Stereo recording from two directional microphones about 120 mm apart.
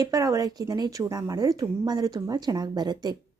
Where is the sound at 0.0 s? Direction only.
30° right (ahead or behind).